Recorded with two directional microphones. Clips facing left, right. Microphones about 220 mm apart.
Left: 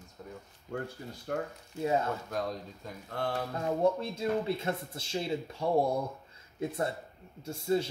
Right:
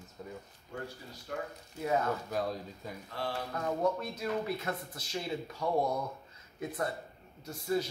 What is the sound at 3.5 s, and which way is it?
Speech, 25° left (ahead or behind).